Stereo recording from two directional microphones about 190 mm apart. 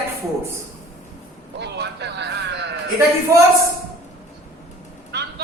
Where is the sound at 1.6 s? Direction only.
65° right (ahead or behind).